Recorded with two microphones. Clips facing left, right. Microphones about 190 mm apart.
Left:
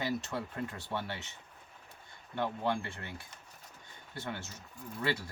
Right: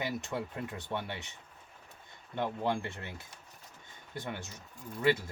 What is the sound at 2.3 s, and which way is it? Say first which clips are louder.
Speech: right 1 dB; 20° right (ahead or behind).